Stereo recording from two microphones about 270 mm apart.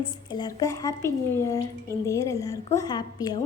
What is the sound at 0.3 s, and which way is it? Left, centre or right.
A woman's voice, centre.